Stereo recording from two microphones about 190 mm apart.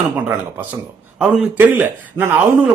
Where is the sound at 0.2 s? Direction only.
10° right (ahead or behind).